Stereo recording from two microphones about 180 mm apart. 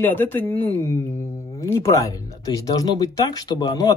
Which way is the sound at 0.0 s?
10° left (ahead or behind).